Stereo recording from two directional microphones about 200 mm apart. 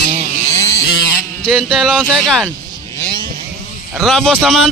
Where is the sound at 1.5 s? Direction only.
Centre (ahead or behind).